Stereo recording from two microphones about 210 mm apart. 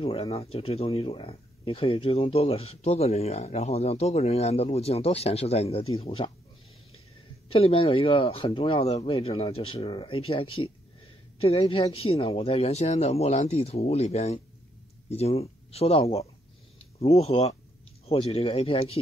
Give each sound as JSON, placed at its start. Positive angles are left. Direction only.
{"t": 0.0, "sound": "speech", "side_deg": 25}
{"t": 7.4, "sound": "speech", "side_deg": 25}